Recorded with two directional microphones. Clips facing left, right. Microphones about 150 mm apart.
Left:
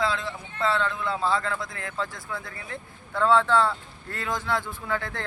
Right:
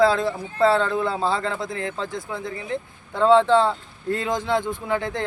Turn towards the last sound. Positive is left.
turn(degrees=-20)  # may be behind; listen again after turning